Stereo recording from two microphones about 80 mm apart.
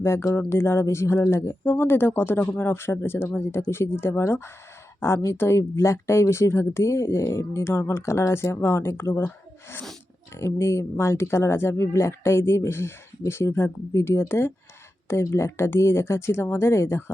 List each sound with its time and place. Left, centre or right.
0.0 s speech: left